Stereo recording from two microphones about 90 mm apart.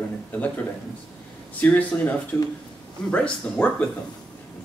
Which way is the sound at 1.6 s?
20° left (ahead or behind).